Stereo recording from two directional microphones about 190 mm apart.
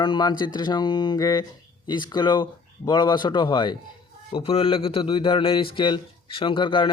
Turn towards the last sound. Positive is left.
turn(degrees=25)  # may be behind; listen again after turning